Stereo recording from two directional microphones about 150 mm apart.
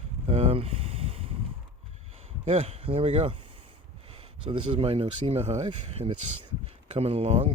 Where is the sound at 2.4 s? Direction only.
40° right (ahead or behind).